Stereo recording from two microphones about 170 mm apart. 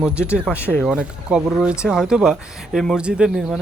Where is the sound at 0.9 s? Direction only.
5° right (ahead or behind).